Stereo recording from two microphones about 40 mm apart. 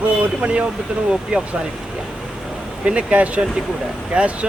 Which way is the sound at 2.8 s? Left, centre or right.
Right.